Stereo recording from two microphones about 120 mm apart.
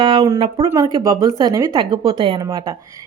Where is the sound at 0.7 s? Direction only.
30° right (ahead or behind).